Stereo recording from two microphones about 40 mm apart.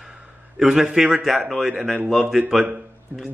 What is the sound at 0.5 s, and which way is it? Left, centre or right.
Speech, centre.